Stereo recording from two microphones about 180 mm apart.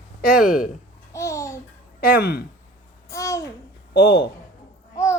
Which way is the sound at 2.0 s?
55° left (ahead or behind).